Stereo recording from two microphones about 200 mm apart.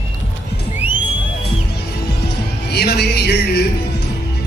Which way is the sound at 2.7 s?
55° left (ahead or behind).